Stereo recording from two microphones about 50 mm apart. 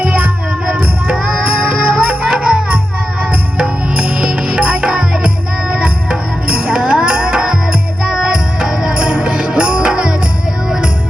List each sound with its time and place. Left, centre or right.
0.0 s music: right